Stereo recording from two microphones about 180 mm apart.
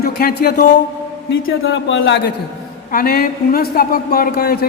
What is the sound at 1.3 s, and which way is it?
Speech, 90° left.